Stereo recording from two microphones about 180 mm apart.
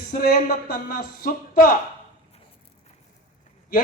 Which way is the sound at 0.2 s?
55° left (ahead or behind).